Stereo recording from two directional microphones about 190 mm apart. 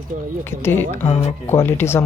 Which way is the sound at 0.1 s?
45° right (ahead or behind).